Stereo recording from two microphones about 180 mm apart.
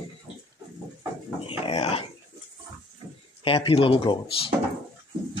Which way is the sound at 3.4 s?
30° left (ahead or behind).